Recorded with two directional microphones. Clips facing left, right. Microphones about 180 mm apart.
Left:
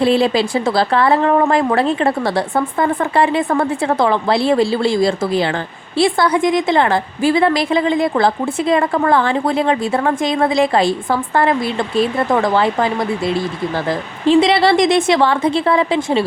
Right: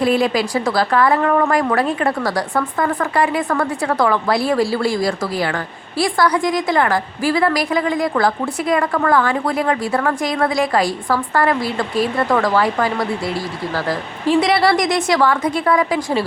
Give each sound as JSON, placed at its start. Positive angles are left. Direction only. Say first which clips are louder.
{"t": 0.0, "sound": "a woman's voice", "louder": "left 2 dB", "side_deg": 30}